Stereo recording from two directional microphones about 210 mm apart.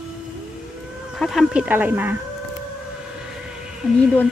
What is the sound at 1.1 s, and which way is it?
A woman's voice, centre (ahead or behind).